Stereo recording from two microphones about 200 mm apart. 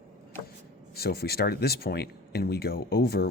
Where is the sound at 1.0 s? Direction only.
50° left (ahead or behind).